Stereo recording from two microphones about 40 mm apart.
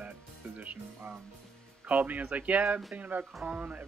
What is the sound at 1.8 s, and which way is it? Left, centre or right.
Speech, right.